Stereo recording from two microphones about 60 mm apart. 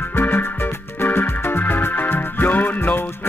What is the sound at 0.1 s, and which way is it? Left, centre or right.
Music, left.